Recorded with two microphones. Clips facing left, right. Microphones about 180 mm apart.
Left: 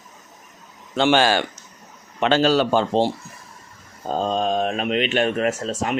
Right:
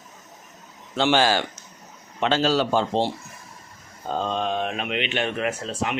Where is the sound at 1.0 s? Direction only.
60° left (ahead or behind).